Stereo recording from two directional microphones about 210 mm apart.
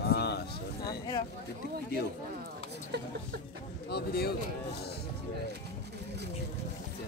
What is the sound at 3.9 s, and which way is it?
Speech, 50° left (ahead or behind).